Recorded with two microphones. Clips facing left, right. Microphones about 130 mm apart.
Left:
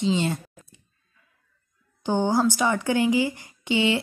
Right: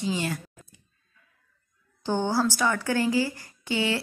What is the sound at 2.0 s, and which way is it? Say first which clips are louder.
A woman's voice: left 3 dB; 15° left (ahead or behind).